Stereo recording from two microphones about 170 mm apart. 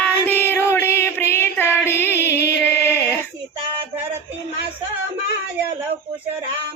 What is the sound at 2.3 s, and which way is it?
Music, 75° left (ahead or behind).